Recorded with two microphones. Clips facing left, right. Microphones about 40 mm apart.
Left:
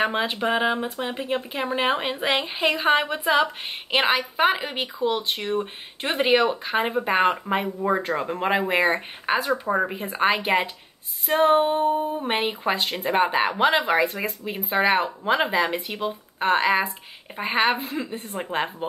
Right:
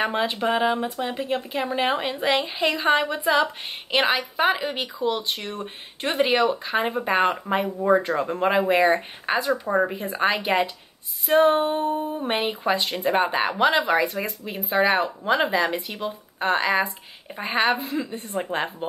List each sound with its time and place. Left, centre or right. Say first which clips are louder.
0.1 s speech: even; centre
11.3 s a sound: right 3 dB; centre
11.6 s speech: left 2 dB; centre
14.0 s speech: left 1 dB; left
17.7 s a woman's voice: right 1 dB; left
18.4 s speech: left 1 dB; centre